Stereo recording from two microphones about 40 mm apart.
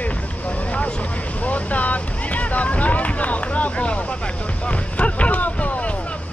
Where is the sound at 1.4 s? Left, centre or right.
Left.